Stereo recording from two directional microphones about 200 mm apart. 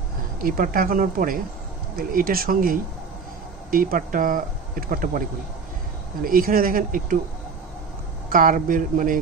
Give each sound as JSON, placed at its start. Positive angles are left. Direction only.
{"t": 0.4, "sound": "speech", "side_deg": -45}
{"t": 6.2, "sound": "speech", "side_deg": -45}
{"t": 8.3, "sound": "speech", "side_deg": -45}